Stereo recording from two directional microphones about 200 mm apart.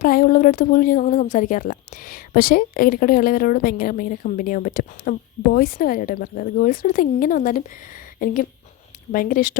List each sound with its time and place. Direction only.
0.0 s speech: 45° left (ahead or behind)